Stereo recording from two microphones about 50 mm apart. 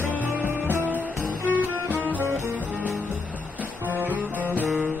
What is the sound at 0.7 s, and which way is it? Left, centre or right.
Music, right.